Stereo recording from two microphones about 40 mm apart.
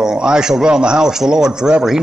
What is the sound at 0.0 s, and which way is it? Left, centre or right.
A man's voice, centre.